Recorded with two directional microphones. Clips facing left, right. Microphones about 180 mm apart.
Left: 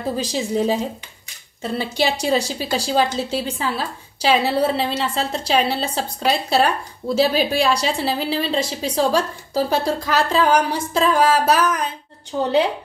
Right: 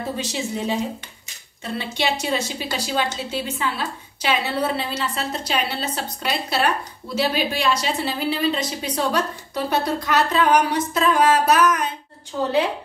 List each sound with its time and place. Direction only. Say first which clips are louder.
0.2 s a woman's voice: left 5 dB; 35° left (ahead or behind)
1.8 s a woman's voice: left 3 dB; 35° left (ahead or behind)